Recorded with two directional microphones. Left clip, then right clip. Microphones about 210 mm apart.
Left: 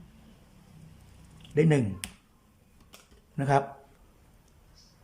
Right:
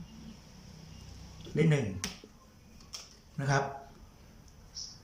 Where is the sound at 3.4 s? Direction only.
30° left (ahead or behind).